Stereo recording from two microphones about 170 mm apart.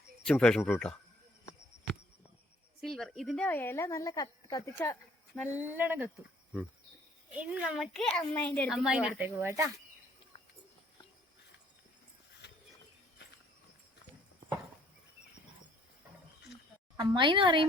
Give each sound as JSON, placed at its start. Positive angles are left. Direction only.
{"t": 0.3, "sound": "speech", "side_deg": 5}
{"t": 2.9, "sound": "speech", "side_deg": 0}
{"t": 5.3, "sound": "speech", "side_deg": -5}
{"t": 7.3, "sound": "speech", "side_deg": -5}
{"t": 8.7, "sound": "speech", "side_deg": -5}
{"t": 17.0, "sound": "a woman's voice", "side_deg": -25}